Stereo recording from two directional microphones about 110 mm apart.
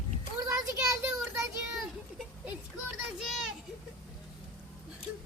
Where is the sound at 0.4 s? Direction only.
30° right (ahead or behind).